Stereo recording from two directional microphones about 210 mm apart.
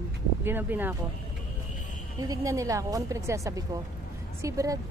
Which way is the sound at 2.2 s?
15° right (ahead or behind).